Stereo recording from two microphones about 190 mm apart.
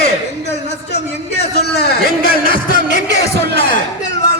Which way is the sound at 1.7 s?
55° left (ahead or behind).